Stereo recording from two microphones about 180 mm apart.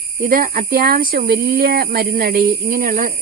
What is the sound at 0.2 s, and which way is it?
Speech, 50° right (ahead or behind).